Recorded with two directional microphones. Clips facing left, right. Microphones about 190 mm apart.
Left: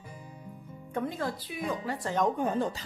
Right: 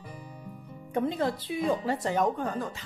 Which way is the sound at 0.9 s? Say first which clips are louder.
Right 5 dB; 20° right (ahead or behind).